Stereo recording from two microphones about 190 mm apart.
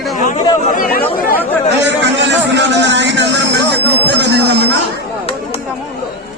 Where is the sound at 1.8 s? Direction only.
70° right (ahead or behind).